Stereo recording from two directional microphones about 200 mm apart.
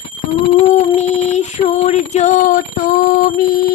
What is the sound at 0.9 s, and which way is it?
Synthetic singing, 35° left (ahead or behind).